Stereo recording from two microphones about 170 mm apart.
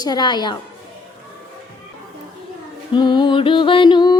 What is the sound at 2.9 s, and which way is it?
A woman's voice, 25° left (ahead or behind).